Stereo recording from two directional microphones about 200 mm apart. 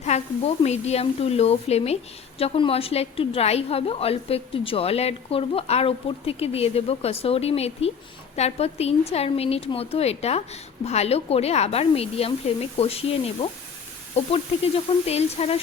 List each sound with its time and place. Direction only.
0.0 s a woman's voice: 30° left (ahead or behind)